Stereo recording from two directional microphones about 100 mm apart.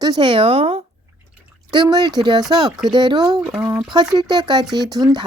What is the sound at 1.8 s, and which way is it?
Speech, 45° right (ahead or behind).